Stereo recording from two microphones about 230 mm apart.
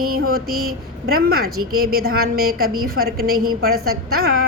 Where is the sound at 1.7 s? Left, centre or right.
Right.